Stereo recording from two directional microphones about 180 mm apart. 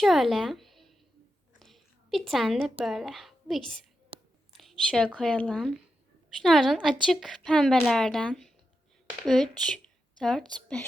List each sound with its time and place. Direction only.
0.0 s a woman's voice: centre (ahead or behind)